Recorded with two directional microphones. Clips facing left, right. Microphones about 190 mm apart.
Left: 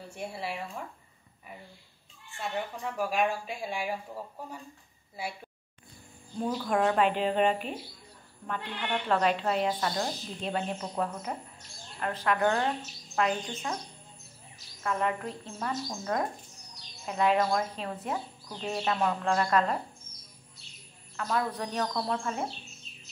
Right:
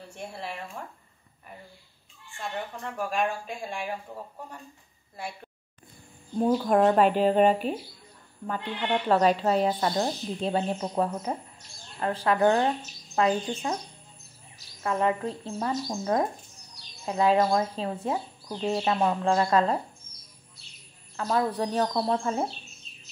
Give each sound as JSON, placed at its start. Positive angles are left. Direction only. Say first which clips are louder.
{"t": 0.1, "sound": "a woman's voice", "louder": "left 1 dB", "side_deg": 5}
{"t": 2.3, "sound": "speech", "louder": "even", "side_deg": 5}
{"t": 5.1, "sound": "speech", "louder": "even", "side_deg": 5}
{"t": 6.3, "sound": "speech", "louder": "right 7 dB", "side_deg": -40}
{"t": 14.8, "sound": "speech", "louder": "right 4 dB", "side_deg": -30}
{"t": 21.2, "sound": "speech", "louder": "right 5 dB", "side_deg": -30}